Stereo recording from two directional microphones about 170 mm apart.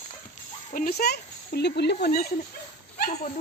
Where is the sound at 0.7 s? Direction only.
60° left (ahead or behind); by 2.1 s 80° left.